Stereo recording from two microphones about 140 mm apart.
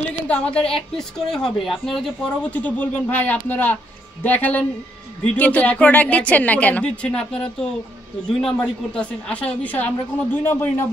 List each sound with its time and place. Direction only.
0.3 s a woman's voice: 5° left (ahead or behind)